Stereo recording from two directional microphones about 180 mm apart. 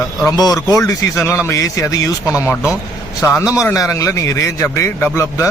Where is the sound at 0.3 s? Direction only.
20° left (ahead or behind).